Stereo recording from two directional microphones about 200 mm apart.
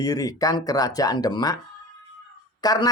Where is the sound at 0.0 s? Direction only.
20° left (ahead or behind).